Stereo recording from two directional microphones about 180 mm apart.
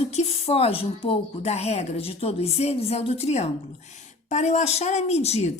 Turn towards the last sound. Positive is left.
turn(degrees=35)  # may be behind; listen again after turning